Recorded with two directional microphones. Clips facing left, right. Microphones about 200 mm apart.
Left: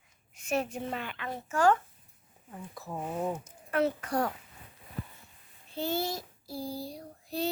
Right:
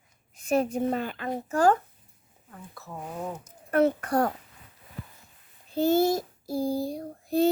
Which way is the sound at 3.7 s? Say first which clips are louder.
Right 6 dB; 50° right (ahead or behind).